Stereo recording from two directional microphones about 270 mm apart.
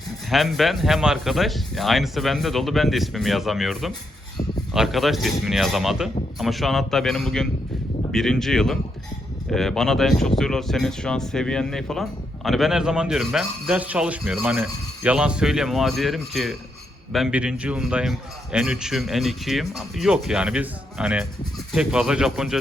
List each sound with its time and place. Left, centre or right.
0.3 s speech: centre